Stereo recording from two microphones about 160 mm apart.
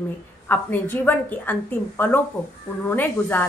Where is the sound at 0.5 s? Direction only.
10° left (ahead or behind).